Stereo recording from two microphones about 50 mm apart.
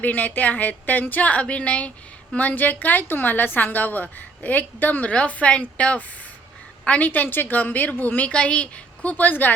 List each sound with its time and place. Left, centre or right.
0.0 s a woman's voice: left
8.3 s a woman's voice: left